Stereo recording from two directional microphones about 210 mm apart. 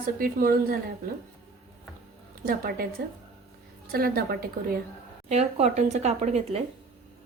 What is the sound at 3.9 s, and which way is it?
Speech, 45° right (ahead or behind).